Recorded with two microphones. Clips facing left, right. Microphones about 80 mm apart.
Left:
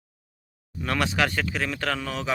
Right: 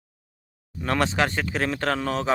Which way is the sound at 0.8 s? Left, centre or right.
Right.